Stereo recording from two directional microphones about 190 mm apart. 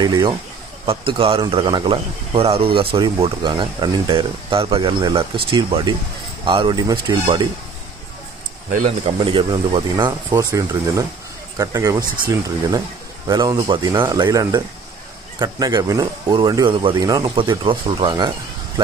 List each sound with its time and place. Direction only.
0.0 s a man's voice: 25° right (ahead or behind)
8.7 s a man's voice: 30° right (ahead or behind)